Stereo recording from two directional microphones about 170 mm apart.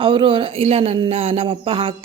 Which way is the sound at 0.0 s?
30° right (ahead or behind).